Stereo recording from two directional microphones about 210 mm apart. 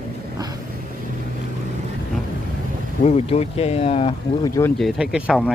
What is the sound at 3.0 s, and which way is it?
Speech, 30° left (ahead or behind).